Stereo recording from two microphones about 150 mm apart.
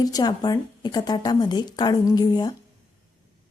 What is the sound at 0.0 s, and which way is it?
A woman's voice, 25° left (ahead or behind).